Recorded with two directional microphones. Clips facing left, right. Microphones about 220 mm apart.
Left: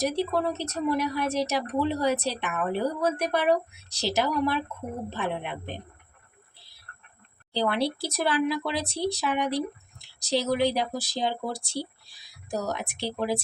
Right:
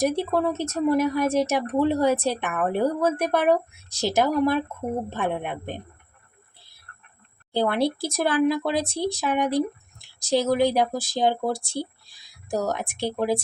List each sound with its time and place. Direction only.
0.0 s speech: 50° right (ahead or behind)
7.5 s speech: 50° right (ahead or behind)